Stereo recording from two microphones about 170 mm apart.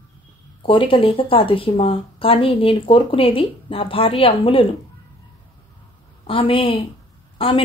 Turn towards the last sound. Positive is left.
turn(degrees=30)  # may be behind; listen again after turning